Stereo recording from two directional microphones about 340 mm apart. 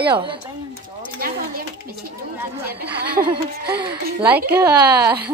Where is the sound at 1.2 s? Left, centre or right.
Right.